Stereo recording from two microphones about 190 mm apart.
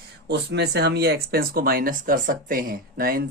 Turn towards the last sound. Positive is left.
turn(degrees=-50)  # may be behind; listen again after turning